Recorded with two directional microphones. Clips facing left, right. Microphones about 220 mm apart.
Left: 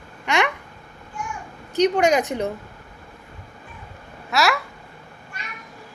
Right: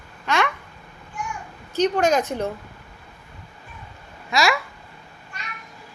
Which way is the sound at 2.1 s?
15° left (ahead or behind).